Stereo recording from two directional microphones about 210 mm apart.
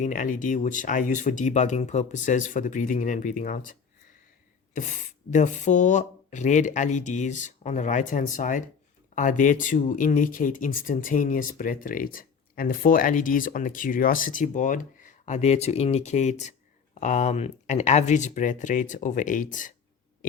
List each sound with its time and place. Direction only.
0.0 s speech: 40° left (ahead or behind)